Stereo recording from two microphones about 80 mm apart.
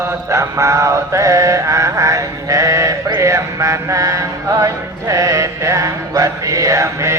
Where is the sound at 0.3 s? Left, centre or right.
Right.